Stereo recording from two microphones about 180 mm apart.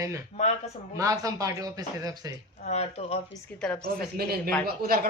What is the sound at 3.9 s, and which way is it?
Speech, 60° right (ahead or behind).